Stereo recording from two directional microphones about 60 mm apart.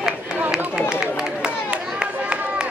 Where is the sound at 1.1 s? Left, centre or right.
Centre.